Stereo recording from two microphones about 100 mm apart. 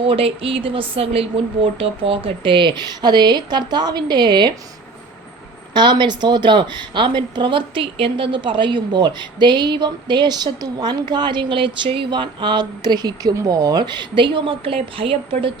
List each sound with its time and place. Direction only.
0.0 s speech: 70° right (ahead or behind)
1.8 s a woman's voice: 65° right (ahead or behind); by 4.5 s 50° right (ahead or behind)
5.7 s a woman's voice: 50° right (ahead or behind); by 15.5 s 65° right (ahead or behind)